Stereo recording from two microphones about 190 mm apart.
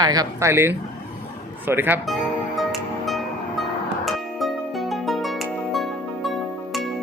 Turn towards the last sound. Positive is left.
turn(degrees=0)  # may be behind; listen again after turning